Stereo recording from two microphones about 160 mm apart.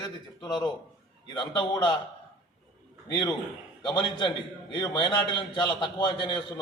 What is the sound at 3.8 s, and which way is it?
A man's voice, 25° left (ahead or behind).